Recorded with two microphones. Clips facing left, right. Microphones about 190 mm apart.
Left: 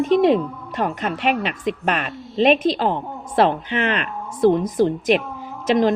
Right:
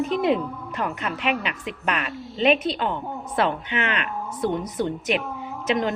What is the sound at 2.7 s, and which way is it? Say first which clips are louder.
Speech: left 5 dB; 35° left (ahead or behind).